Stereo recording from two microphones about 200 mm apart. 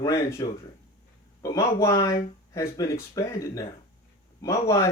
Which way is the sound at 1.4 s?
15° left (ahead or behind).